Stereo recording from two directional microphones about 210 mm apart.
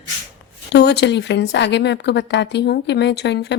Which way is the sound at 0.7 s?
55° left (ahead or behind).